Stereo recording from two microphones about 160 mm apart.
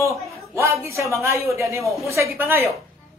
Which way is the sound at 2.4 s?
15° right (ahead or behind).